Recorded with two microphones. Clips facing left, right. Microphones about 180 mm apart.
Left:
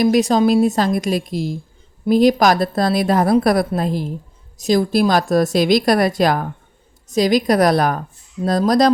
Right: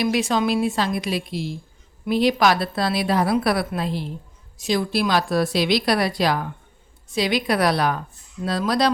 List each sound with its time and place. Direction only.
0.0 s a woman's voice: 40° left (ahead or behind)